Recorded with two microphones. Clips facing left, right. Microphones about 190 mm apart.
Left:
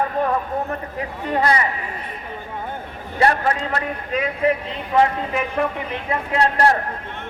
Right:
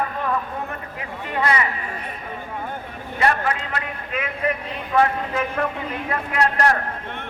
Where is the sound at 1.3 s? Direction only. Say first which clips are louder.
Left 3 dB; 35° left (ahead or behind).